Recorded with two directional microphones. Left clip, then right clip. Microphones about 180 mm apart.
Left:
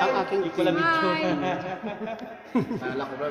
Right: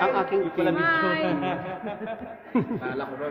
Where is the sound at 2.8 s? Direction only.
30° left (ahead or behind).